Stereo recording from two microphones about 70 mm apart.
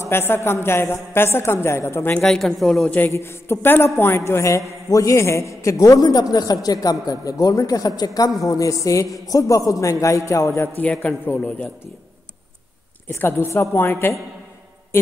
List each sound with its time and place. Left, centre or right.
0.0 s a woman's voice: left
2.1 s a woman's voice: centre
3.1 s a man's voice: left
6.3 s speech: left
8.4 s a man's voice: left
10.8 s a man's voice: left
11.2 s a woman's voice: left
13.7 s a woman's voice: left